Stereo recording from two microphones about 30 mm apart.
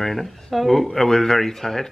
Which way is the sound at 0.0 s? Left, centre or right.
Centre.